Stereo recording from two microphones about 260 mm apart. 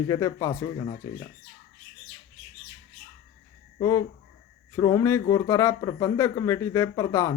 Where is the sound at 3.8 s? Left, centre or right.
Centre.